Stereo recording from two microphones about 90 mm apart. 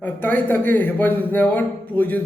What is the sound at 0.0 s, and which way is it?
A man's voice, 20° left (ahead or behind).